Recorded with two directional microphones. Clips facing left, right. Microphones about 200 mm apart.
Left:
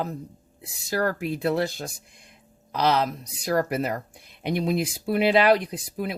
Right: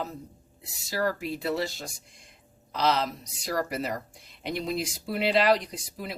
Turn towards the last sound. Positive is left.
turn(degrees=55)  # may be behind; listen again after turning